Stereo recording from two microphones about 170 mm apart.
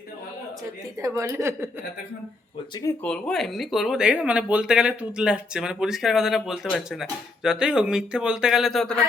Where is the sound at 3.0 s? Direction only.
5° left (ahead or behind).